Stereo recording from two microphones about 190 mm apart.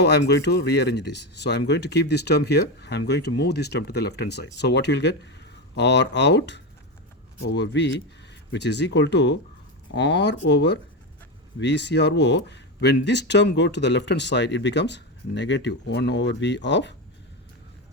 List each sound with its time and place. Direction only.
0.0 s speech: 60° left (ahead or behind)